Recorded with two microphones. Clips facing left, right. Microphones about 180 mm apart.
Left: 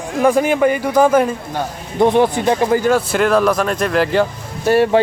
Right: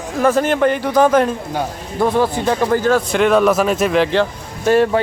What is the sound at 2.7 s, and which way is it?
Speech, 10° left (ahead or behind).